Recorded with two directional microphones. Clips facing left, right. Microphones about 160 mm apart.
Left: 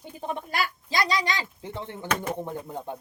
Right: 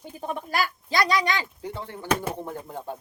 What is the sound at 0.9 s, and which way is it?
Speech, 20° left (ahead or behind).